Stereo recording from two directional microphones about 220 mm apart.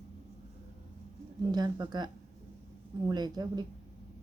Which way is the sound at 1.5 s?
20° right (ahead or behind).